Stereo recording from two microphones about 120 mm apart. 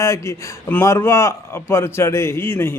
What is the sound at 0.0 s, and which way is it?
A man's voice, 25° left (ahead or behind).